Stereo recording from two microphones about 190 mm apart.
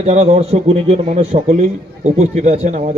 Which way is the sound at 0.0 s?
35° right (ahead or behind).